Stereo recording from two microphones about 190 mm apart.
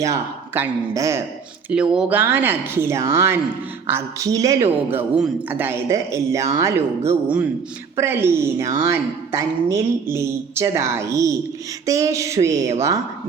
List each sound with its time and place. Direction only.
0.0 s a woman's voice: 15° right (ahead or behind)
1.7 s a woman's voice: 5° right (ahead or behind)